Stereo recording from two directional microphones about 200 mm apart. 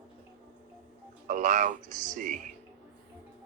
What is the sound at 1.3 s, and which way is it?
Speech, 40° right (ahead or behind).